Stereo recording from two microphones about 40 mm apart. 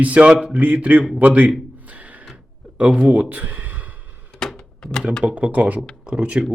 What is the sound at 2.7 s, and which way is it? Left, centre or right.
Speech, right.